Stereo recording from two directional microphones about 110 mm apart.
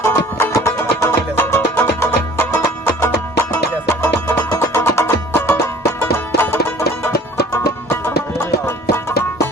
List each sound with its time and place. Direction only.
0.0 s music: 25° left (ahead or behind)